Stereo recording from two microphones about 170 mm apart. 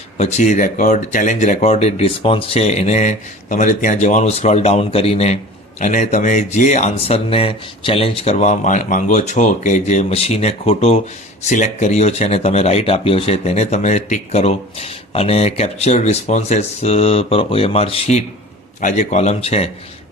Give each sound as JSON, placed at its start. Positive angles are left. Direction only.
{"t": 0.2, "sound": "speech", "side_deg": 40}
{"t": 18.8, "sound": "speech", "side_deg": 45}